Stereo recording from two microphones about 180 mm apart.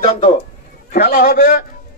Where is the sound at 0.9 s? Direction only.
55° left (ahead or behind).